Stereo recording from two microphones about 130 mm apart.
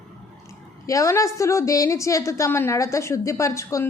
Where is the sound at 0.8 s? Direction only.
25° left (ahead or behind).